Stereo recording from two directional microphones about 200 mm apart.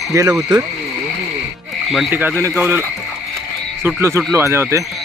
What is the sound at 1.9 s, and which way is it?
Speech, 5° right (ahead or behind).